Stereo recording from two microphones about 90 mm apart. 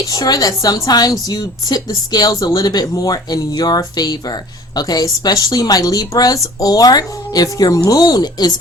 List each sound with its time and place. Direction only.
0.0 s a woman's voice: 45° left (ahead or behind)